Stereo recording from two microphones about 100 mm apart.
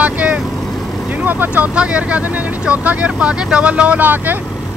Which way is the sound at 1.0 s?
15° right (ahead or behind).